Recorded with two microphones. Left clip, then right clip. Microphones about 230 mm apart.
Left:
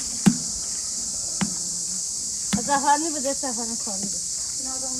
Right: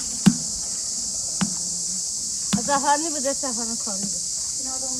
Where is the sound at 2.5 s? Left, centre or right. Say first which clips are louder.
Even; centre.